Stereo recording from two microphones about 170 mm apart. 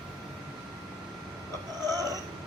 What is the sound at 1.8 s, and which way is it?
Cat, 20° right (ahead or behind).